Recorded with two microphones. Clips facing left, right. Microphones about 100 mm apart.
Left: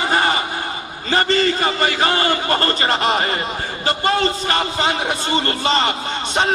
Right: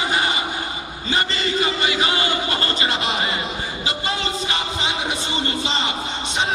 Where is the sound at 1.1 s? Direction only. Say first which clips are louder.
Left 6 dB; 45° left (ahead or behind); by 6.5 s 60° left (ahead or behind).